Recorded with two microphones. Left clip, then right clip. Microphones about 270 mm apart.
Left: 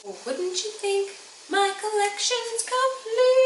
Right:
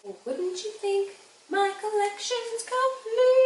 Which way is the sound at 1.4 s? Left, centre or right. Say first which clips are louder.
Left 2 dB; centre.